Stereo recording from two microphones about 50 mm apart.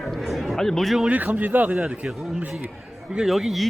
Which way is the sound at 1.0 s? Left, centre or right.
Right.